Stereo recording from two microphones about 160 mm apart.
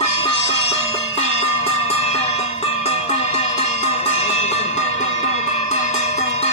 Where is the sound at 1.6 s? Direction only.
40° left (ahead or behind).